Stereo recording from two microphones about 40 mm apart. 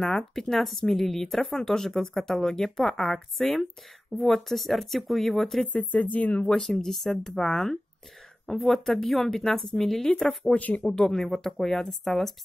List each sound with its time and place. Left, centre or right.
0.0 s speech: centre
5.7 s speech: left
6.6 s speech: centre
10.5 s speech: left
10.9 s speech: centre
11.1 s speech: centre